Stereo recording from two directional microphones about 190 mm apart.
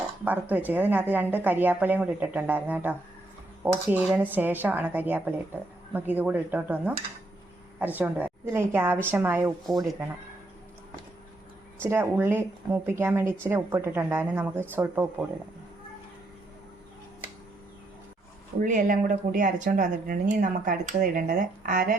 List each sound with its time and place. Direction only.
0.3 s a woman's voice: 10° right (ahead or behind)
7.9 s a woman's voice: 10° right (ahead or behind)
11.8 s a woman's voice: 10° right (ahead or behind)
18.6 s speech: 45° right (ahead or behind)